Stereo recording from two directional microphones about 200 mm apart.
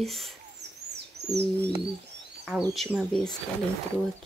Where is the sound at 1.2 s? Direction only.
55° right (ahead or behind).